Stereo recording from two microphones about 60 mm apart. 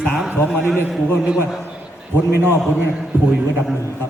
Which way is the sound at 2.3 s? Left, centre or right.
Right.